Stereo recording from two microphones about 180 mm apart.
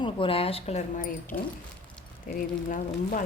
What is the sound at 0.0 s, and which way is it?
A woman's voice, 30° left (ahead or behind).